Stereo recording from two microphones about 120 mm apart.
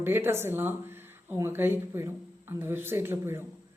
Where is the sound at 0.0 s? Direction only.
20° right (ahead or behind).